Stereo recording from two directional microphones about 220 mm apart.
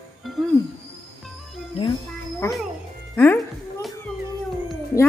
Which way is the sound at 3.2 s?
10° left (ahead or behind).